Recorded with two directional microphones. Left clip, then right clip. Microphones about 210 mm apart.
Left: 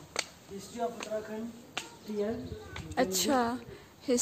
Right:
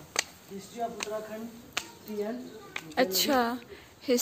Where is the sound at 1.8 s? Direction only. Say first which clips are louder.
Right 4 dB; 50° right (ahead or behind).